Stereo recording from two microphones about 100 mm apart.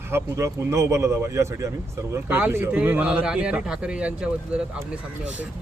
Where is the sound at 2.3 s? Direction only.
15° right (ahead or behind).